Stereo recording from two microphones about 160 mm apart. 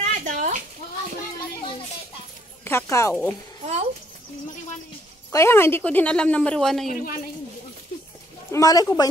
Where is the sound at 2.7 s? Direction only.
15° left (ahead or behind).